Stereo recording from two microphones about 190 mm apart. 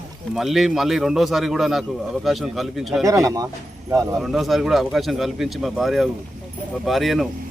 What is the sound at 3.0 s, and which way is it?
Speech, 15° right (ahead or behind).